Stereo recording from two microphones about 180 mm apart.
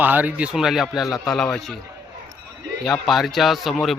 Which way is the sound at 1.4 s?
Centre (ahead or behind).